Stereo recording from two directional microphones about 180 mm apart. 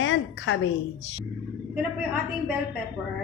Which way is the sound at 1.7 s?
10° right (ahead or behind).